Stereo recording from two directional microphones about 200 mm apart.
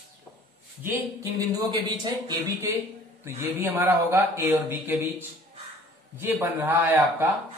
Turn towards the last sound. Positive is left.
turn(degrees=-10)  # may be behind; listen again after turning